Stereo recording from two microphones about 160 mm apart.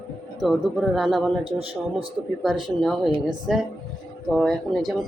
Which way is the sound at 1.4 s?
35° right (ahead or behind).